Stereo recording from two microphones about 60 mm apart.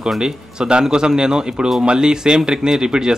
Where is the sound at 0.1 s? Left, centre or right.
Centre.